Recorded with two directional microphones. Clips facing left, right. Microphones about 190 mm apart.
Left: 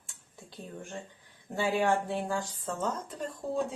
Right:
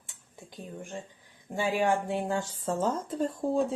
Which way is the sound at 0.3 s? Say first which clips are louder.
Right 2 dB; 15° right (ahead or behind).